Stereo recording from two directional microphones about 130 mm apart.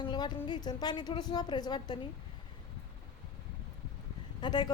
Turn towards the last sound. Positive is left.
turn(degrees=35)  # may be behind; listen again after turning